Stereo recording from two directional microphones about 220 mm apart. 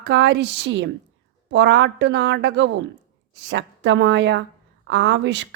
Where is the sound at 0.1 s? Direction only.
55° right (ahead or behind).